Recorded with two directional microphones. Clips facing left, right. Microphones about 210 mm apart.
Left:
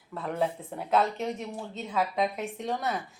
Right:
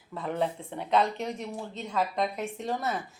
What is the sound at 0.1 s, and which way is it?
Speech, centre (ahead or behind).